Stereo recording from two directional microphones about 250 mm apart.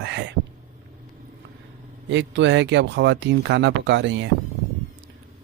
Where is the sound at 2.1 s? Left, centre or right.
Right.